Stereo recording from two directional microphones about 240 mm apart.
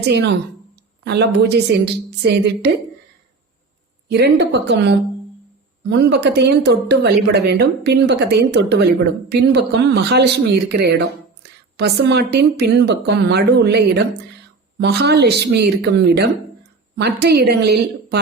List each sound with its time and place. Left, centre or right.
0.0 s speech: right
4.1 s speech: right